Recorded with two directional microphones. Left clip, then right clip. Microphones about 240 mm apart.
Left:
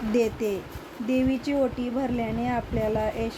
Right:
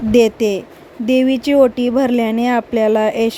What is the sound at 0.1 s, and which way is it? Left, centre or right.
Speech, right.